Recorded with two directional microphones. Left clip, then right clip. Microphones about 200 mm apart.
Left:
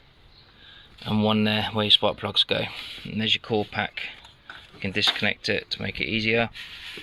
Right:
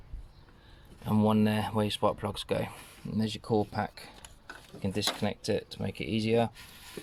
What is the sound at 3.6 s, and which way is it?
Speech, 10° left (ahead or behind).